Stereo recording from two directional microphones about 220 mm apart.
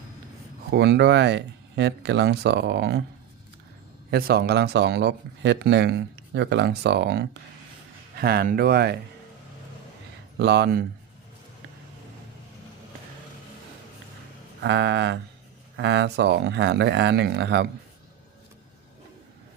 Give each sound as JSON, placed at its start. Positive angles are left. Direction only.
{"t": 0.7, "sound": "speech", "side_deg": -50}
{"t": 4.1, "sound": "speech", "side_deg": -45}
{"t": 10.3, "sound": "speech", "side_deg": -50}
{"t": 14.6, "sound": "speech", "side_deg": -55}